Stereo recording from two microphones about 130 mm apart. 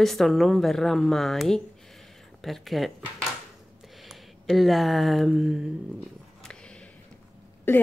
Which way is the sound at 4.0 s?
Centre (ahead or behind).